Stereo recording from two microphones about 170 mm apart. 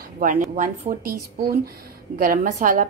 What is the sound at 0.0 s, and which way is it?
Speech, 50° right (ahead or behind).